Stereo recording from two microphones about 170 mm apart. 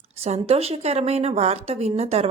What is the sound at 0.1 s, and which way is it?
A woman's voice, 40° right (ahead or behind).